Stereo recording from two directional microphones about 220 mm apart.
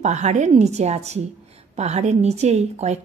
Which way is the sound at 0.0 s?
30° right (ahead or behind).